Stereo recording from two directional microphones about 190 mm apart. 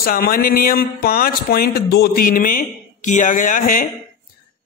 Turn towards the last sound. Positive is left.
turn(degrees=45)  # may be behind; listen again after turning